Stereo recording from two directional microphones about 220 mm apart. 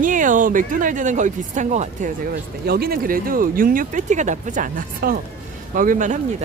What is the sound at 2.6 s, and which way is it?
Speech, 45° right (ahead or behind).